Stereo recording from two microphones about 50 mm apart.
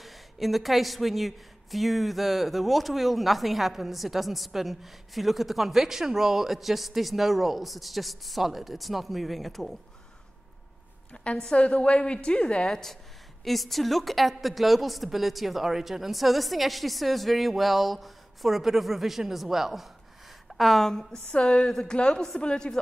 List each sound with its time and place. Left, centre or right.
0.0 s a woman's voice: centre
11.3 s a woman's voice: centre
12.6 s a woman's voice: centre
21.1 s a woman's voice: left